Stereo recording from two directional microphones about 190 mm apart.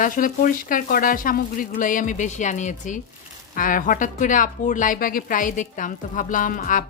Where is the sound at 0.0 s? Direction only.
45° left (ahead or behind).